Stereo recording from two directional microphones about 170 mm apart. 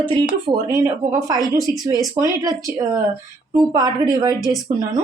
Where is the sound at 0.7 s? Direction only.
20° right (ahead or behind).